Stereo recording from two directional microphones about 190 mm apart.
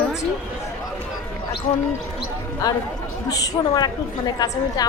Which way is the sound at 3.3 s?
20° left (ahead or behind).